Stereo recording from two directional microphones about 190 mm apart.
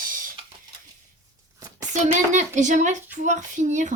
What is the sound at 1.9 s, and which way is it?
Speech, 40° right (ahead or behind).